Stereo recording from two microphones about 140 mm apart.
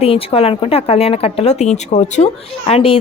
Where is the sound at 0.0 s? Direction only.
45° left (ahead or behind).